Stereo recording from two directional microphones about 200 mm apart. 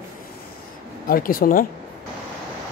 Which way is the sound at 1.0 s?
45° left (ahead or behind).